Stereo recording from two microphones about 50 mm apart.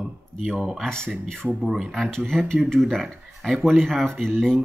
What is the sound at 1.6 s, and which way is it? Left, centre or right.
Speech, centre.